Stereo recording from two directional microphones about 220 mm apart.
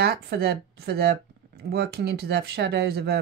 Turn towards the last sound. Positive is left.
turn(degrees=-45)  # may be behind; listen again after turning